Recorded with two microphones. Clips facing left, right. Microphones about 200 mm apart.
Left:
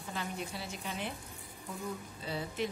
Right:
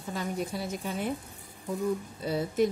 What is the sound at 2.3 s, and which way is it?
Speech, 40° right (ahead or behind).